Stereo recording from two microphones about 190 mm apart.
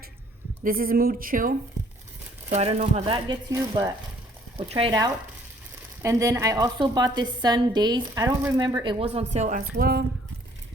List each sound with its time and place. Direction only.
0.6 s speech: 50° right (ahead or behind)
2.5 s speech: 35° right (ahead or behind)
3.2 s a woman's voice: 20° right (ahead or behind); by 9.6 s 35° right (ahead or behind)
9.7 s speech: 55° right (ahead or behind)